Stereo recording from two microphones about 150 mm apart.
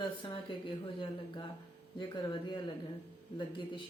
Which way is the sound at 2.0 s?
30° left (ahead or behind).